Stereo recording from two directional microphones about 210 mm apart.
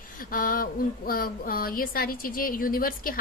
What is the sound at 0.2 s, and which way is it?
Speech, 40° left (ahead or behind).